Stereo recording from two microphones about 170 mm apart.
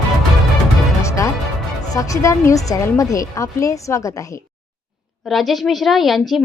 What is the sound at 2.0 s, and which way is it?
A woman's voice, 20° left (ahead or behind).